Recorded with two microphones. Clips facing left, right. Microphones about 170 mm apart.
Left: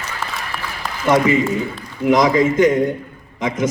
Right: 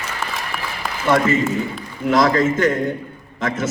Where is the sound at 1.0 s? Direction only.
20° left (ahead or behind).